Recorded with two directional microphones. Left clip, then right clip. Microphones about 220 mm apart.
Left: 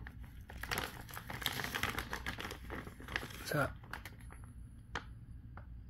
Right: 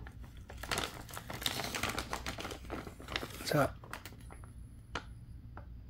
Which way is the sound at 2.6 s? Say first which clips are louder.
Right 3 dB; 15° right (ahead or behind).